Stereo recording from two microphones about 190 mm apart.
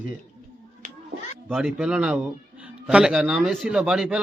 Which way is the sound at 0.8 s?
45° right (ahead or behind).